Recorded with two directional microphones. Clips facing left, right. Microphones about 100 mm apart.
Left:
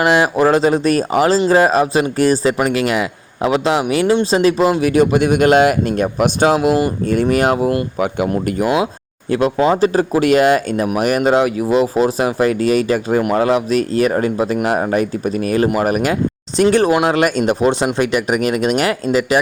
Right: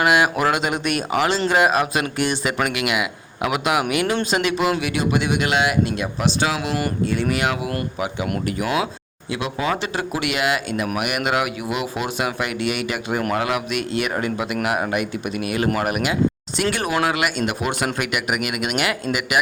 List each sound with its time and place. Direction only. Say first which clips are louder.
0.0 s a man's voice: left 5 dB; 30° left (ahead or behind)